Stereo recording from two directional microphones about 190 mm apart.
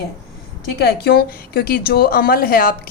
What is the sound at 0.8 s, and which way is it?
A woman's voice, 55° left (ahead or behind).